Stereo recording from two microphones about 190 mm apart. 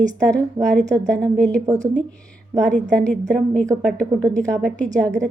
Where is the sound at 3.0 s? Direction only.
5° left (ahead or behind).